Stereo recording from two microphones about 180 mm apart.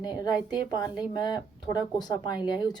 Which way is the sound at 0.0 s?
25° left (ahead or behind).